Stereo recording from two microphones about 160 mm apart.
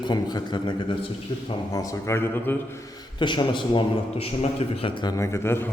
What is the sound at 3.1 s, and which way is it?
A man's voice, 30° left (ahead or behind).